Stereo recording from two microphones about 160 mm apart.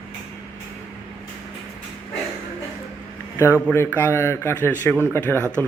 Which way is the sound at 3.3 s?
15° left (ahead or behind).